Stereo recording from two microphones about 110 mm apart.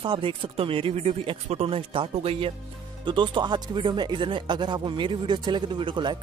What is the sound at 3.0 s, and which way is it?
Speech, 50° right (ahead or behind).